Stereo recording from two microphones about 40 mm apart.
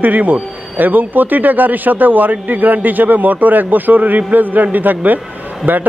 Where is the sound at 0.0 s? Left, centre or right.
Right.